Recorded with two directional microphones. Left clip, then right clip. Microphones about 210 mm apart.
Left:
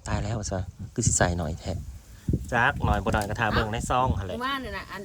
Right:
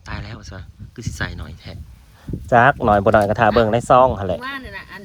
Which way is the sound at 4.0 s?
10° right (ahead or behind).